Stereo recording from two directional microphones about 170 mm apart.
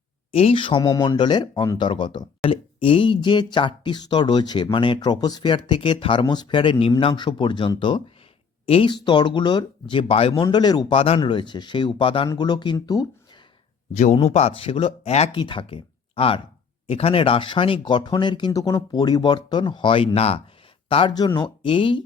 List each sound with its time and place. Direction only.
0.3 s speech: 35° left (ahead or behind)
10.4 s speech: 25° left (ahead or behind)
13.9 s speech: 45° left (ahead or behind)